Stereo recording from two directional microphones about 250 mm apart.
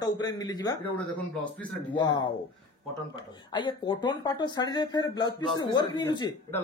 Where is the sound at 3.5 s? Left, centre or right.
Centre.